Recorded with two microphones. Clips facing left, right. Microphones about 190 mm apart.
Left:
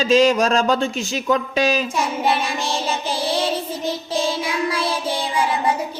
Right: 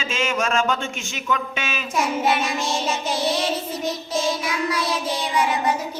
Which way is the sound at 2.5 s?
30° left (ahead or behind).